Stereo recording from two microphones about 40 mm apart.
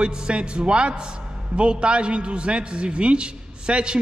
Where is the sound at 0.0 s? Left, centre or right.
Right.